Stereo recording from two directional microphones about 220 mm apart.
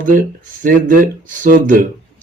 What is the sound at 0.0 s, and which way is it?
Speech, 35° right (ahead or behind).